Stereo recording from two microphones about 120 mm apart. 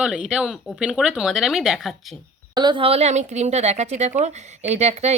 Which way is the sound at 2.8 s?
60° right (ahead or behind).